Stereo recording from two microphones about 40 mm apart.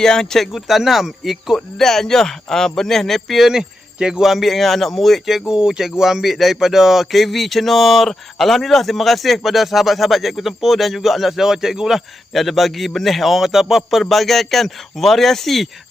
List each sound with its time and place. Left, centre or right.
0.0 s a man's voice: centre
0.5 s speech: centre
1.5 s a man's voice: centre
3.5 s speech: centre
4.2 s speech: centre
5.5 s speech: centre
14.1 s speech: centre